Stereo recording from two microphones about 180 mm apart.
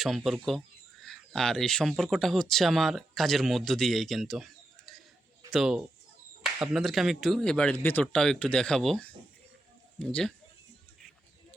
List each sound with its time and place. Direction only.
0.3 s speech: centre (ahead or behind)
4.9 s a sound: centre (ahead or behind)
5.5 s speech: centre (ahead or behind)